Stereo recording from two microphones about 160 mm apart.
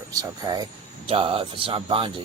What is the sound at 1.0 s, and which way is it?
Speech, 35° right (ahead or behind).